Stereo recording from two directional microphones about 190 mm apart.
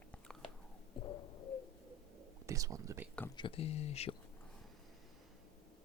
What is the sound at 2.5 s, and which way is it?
Speech, 15° right (ahead or behind).